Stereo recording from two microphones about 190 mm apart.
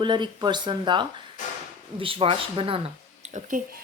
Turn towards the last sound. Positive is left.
turn(degrees=-45)  # may be behind; listen again after turning